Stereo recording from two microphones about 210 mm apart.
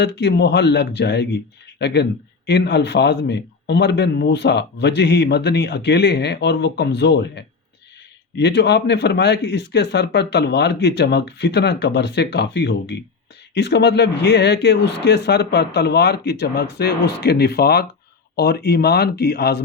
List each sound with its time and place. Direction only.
0.0 s a man's voice: 55° left (ahead or behind)